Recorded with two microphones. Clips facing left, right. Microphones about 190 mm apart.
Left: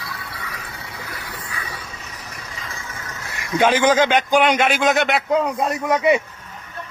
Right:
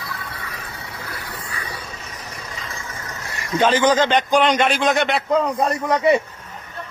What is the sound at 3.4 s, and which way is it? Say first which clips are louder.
A man's voice: even; 10° left (ahead or behind).